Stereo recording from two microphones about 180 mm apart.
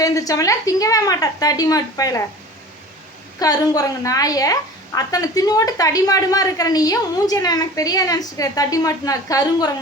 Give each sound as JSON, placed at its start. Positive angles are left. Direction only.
{"t": 0.0, "sound": "a woman's voice", "side_deg": 20}
{"t": 3.4, "sound": "a woman's voice", "side_deg": 20}